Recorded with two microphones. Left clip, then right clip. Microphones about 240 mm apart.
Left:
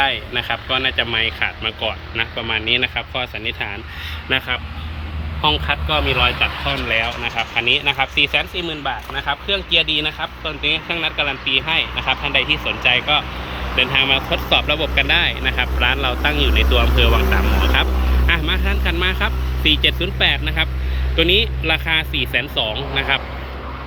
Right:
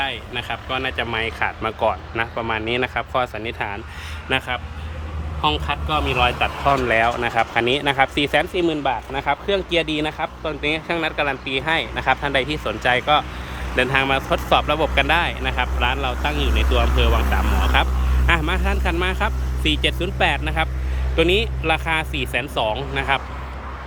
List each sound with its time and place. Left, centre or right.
0.0 s speech: centre
6.7 s speech: right
7.6 s speech: right
8.1 s speech: right
8.6 s speech: right
9.6 s speech: right
10.2 s speech: right
10.6 s speech: right
14.0 s speech: centre